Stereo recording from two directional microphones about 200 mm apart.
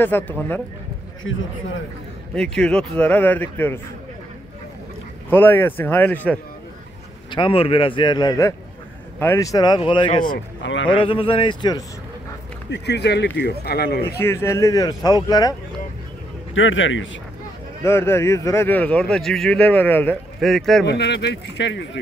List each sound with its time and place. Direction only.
0.0 s speech: 10° left (ahead or behind)
2.3 s speech: 5° left (ahead or behind)
5.3 s speech: 10° left (ahead or behind)
7.2 s a man's voice: 25° left (ahead or behind)
10.6 s a sound: 70° left (ahead or behind)
10.9 s a man's voice: 25° left (ahead or behind)
12.6 s speech: 60° left (ahead or behind)
14.1 s a man's voice: 15° left (ahead or behind)
16.5 s a man's voice: 75° left (ahead or behind)
17.8 s speech: 10° left (ahead or behind)
20.8 s speech: 55° left (ahead or behind)